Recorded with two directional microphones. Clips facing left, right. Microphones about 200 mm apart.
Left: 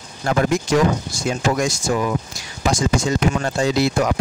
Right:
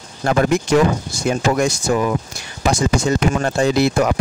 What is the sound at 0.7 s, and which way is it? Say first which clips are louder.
Speech: right 2 dB; 55° right (ahead or behind).